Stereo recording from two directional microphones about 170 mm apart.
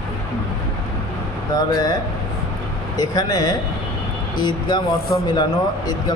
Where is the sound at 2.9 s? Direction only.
25° left (ahead or behind).